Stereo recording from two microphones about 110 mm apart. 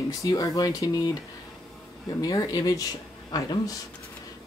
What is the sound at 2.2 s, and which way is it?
Speech, 35° left (ahead or behind).